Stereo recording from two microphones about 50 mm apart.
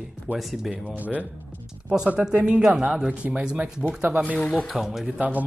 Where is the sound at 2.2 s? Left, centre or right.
Centre.